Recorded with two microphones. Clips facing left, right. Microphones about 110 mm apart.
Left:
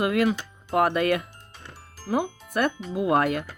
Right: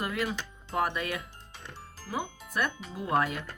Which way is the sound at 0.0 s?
65° left (ahead or behind).